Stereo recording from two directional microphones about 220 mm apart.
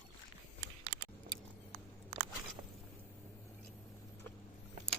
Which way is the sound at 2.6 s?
25° right (ahead or behind).